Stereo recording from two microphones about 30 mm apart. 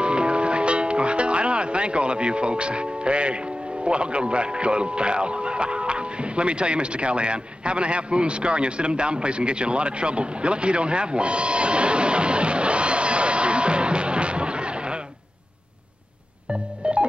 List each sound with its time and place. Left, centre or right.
0.0 s music: right
3.8 s a man's voice: right
16.8 s organ: right